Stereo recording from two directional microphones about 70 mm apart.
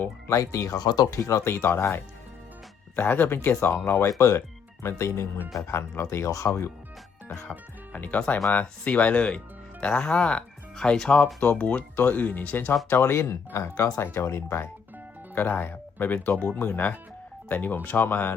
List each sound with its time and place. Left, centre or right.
0.3 s speech: left
0.8 s speech: left
1.1 s speech: left
7.9 s speech: left
13.0 s speech: left
14.0 s speech: left
15.4 s speech: left